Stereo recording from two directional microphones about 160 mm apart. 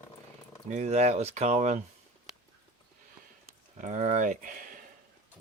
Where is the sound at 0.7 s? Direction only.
45° right (ahead or behind).